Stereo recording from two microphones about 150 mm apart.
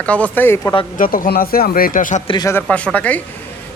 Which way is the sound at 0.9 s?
65° left (ahead or behind).